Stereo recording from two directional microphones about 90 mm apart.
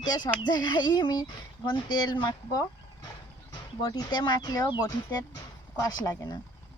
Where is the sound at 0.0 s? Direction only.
50° left (ahead or behind).